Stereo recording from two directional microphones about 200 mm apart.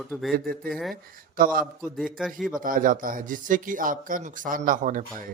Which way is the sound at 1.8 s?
Centre (ahead or behind).